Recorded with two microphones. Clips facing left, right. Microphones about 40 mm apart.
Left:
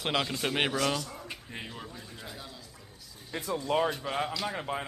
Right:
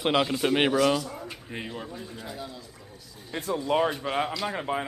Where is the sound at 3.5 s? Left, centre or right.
Centre.